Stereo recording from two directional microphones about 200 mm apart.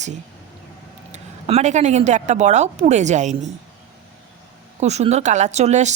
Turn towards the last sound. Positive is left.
turn(degrees=-35)  # may be behind; listen again after turning